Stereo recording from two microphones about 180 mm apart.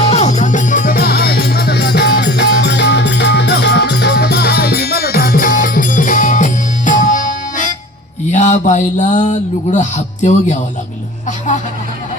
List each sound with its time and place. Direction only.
0.0 s music: 35° left (ahead or behind)
8.3 s a sound: 40° left (ahead or behind)
11.3 s speech: 45° left (ahead or behind)